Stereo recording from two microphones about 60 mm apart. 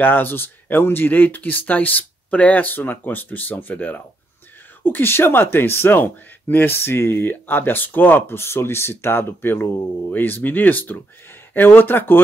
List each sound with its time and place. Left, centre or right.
0.0 s speech: left